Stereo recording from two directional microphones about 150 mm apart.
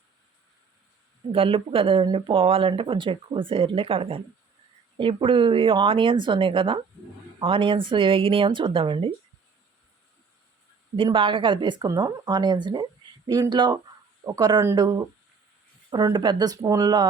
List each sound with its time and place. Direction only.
1.3 s speech: 40° right (ahead or behind)
10.9 s speech: 35° right (ahead or behind)